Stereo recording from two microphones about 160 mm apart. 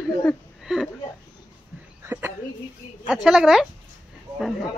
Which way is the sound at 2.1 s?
15° right (ahead or behind).